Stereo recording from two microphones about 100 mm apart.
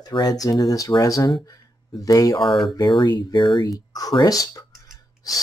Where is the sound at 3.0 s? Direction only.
45° left (ahead or behind).